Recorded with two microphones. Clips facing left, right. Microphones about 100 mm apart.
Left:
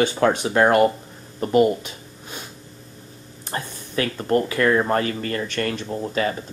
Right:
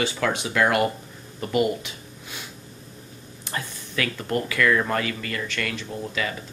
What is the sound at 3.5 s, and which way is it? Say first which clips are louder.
Speech: left 4 dB; 35° left (ahead or behind).